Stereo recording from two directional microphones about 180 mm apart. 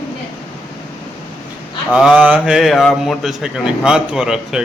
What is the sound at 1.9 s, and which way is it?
Speech, 5° right (ahead or behind).